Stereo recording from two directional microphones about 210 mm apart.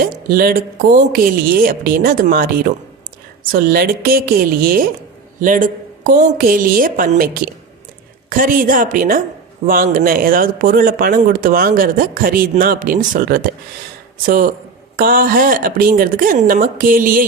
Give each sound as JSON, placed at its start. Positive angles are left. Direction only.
{"t": 0.0, "sound": "speech", "side_deg": -45}
{"t": 3.5, "sound": "speech", "side_deg": -45}